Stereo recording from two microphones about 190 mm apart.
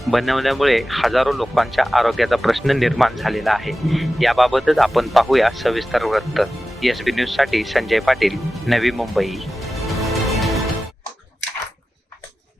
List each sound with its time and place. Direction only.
0.1 s speech: centre (ahead or behind)